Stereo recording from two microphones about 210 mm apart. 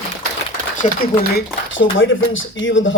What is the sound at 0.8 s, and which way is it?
Speech, 35° left (ahead or behind).